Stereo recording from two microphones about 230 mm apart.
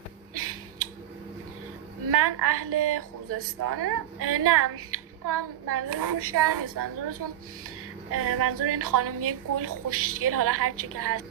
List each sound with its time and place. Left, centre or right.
0.3 s a sound: right
2.0 s a woman's voice: right
8.1 s a woman's voice: right